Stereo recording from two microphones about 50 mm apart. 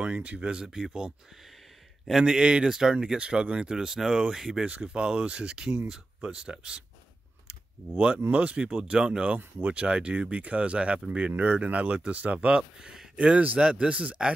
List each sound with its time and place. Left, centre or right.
0.0 s speech: right
2.2 s speech: centre
4.6 s speech: right
7.4 s computer keyboard: right
8.3 s speech: right